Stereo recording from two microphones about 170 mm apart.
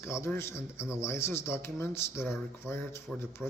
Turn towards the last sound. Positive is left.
turn(degrees=15)  # may be behind; listen again after turning